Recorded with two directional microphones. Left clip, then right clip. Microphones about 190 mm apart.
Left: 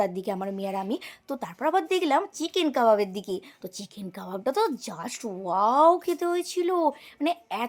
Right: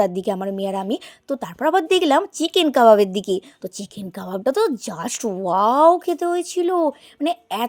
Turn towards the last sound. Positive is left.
turn(degrees=-30)  # may be behind; listen again after turning